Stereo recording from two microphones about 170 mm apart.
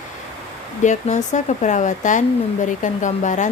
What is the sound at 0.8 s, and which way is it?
Speech, 45° left (ahead or behind).